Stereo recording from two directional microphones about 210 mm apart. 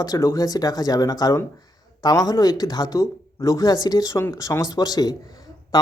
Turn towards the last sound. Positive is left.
turn(degrees=15)  # may be behind; listen again after turning